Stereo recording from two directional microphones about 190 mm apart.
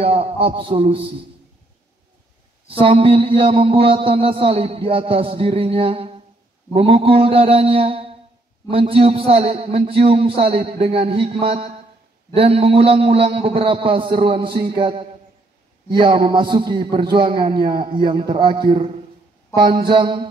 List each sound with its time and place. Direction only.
0.0 s a man's voice: 30° right (ahead or behind)
2.8 s a man's voice: 30° right (ahead or behind)